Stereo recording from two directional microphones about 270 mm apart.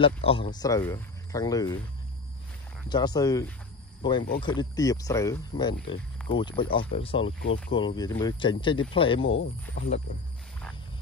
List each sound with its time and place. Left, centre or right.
0.0 s speech: centre
2.9 s speech: centre
9.2 s speech: left